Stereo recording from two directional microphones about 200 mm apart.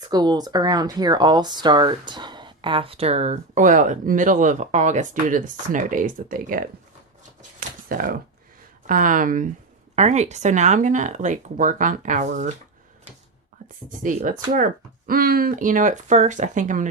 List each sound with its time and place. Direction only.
0.0 s speech: 20° right (ahead or behind); by 6.7 s 45° right (ahead or behind)
7.9 s speech: 45° right (ahead or behind)
14.0 s speech: 40° right (ahead or behind)